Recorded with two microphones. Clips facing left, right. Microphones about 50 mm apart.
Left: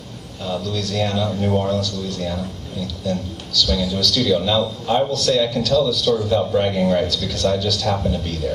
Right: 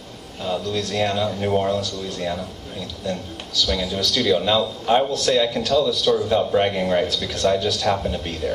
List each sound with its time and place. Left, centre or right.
0.5 s speech: right